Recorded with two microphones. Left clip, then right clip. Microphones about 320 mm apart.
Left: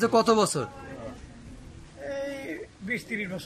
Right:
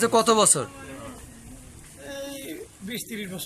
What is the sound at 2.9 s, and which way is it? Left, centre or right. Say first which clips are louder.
Speech: left 4 dB; centre.